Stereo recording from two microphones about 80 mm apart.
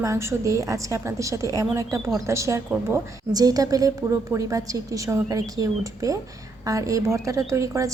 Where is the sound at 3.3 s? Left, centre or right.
Right.